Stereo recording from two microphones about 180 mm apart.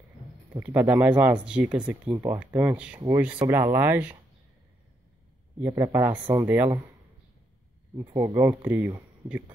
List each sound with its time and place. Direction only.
0.7 s speech: 10° right (ahead or behind)
5.6 s speech: 15° right (ahead or behind)
8.2 s speech: 20° right (ahead or behind)